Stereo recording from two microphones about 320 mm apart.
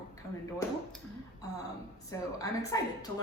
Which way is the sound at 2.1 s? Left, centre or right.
Centre.